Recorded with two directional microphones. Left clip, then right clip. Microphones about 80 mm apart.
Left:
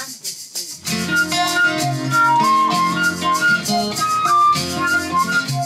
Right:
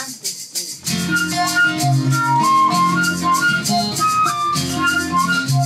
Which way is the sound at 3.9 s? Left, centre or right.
Centre.